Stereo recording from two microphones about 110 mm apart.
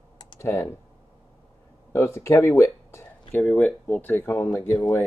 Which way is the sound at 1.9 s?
25° left (ahead or behind).